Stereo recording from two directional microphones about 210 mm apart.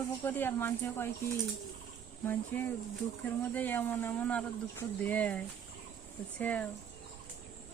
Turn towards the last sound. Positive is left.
turn(degrees=5)  # may be behind; listen again after turning